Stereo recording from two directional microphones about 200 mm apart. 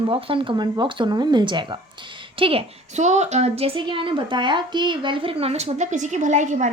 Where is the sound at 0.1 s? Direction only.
25° right (ahead or behind).